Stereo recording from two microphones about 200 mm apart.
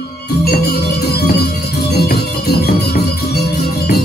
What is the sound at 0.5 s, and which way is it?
Music, 50° left (ahead or behind).